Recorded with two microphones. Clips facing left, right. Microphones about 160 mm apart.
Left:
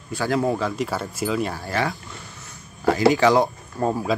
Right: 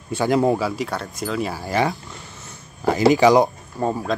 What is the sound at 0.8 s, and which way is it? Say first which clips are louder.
Speech: left 1 dB; 5° left (ahead or behind).